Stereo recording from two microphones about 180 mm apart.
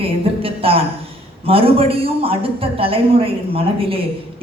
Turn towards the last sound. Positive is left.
turn(degrees=-30)  # may be behind; listen again after turning